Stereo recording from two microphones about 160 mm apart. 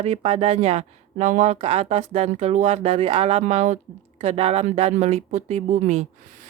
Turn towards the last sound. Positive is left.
turn(degrees=-45)  # may be behind; listen again after turning